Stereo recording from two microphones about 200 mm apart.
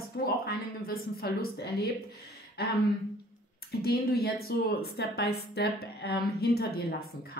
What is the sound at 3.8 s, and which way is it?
A woman's voice, 50° left (ahead or behind).